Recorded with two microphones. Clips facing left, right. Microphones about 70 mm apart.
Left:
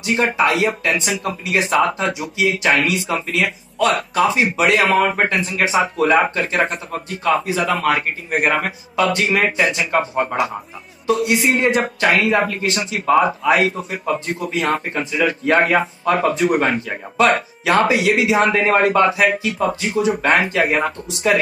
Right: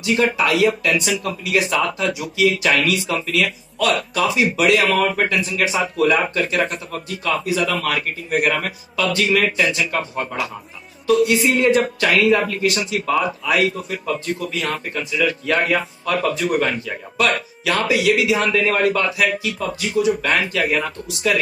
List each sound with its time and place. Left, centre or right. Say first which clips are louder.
0.0 s speech: left 1 dB; left